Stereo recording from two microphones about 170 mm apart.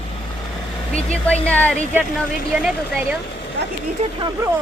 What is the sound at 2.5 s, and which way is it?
Speech, 5° right (ahead or behind).